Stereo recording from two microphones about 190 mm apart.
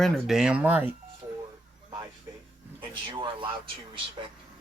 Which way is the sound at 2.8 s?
25° right (ahead or behind).